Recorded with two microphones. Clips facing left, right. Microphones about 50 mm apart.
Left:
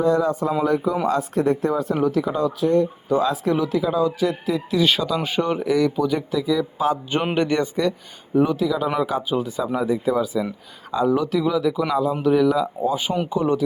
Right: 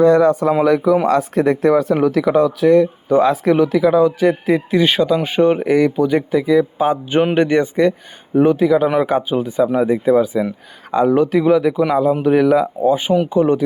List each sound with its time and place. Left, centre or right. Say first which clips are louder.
0.0 s speech: right 8 dB; right
1.7 s speech: right 6 dB; right
4.2 s speech: right 7 dB; right
10.9 s speech: right 6 dB; right
12.8 s speech: right 7 dB; right